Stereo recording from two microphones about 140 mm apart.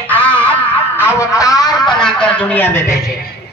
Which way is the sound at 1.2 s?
25° left (ahead or behind).